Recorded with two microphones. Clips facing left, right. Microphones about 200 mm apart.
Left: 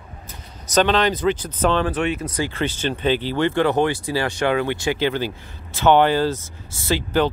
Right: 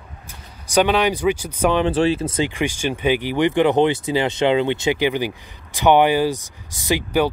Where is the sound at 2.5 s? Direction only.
10° right (ahead or behind).